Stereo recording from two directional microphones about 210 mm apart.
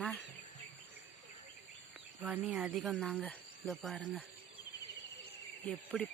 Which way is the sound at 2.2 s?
5° right (ahead or behind).